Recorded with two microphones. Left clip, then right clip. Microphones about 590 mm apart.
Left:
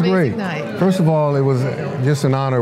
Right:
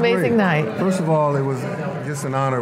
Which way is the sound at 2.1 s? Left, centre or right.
Left.